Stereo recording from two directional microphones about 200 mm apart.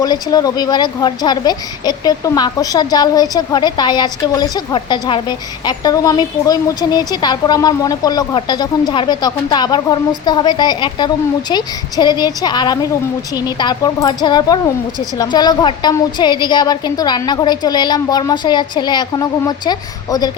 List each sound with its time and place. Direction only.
0.0 s speech: 20° left (ahead or behind)